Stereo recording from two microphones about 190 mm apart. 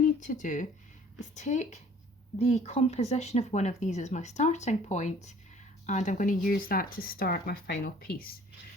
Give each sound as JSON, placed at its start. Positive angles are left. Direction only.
{"t": 0.2, "sound": "speech", "side_deg": 40}